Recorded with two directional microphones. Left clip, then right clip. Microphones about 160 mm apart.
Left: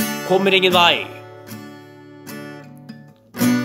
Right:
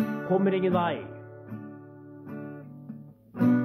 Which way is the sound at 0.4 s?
20° left (ahead or behind).